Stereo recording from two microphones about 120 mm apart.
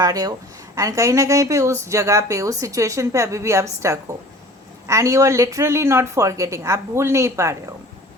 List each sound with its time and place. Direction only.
0.0 s a woman's voice: 30° right (ahead or behind)